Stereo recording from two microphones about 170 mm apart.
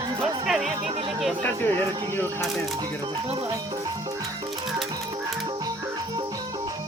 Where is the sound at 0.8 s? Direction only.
35° right (ahead or behind).